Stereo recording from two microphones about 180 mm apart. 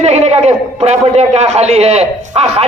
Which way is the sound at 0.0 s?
35° right (ahead or behind).